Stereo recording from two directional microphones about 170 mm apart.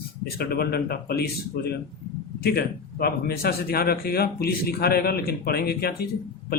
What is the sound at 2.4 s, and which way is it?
Speech, 65° left (ahead or behind).